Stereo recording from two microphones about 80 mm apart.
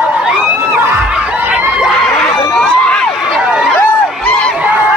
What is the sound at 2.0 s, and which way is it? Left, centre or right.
Crowd, centre.